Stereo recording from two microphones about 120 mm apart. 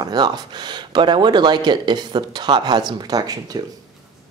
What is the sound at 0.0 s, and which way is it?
Speech, 35° right (ahead or behind).